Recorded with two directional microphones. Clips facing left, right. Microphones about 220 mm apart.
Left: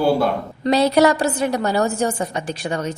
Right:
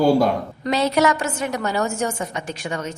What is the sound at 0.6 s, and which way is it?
A woman's voice, 35° left (ahead or behind).